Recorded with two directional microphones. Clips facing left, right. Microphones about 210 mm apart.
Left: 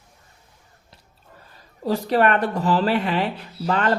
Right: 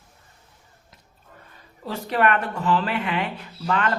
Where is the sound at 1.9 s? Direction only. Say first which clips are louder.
Left 3 dB; 35° left (ahead or behind).